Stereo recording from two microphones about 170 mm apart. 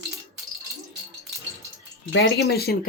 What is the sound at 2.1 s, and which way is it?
Speech, 75° left (ahead or behind).